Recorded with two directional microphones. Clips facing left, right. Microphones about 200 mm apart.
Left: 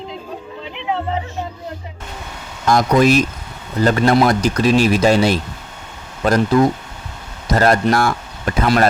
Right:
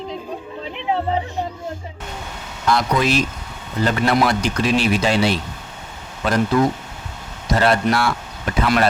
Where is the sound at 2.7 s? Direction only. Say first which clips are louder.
Left 5 dB; 45° left (ahead or behind).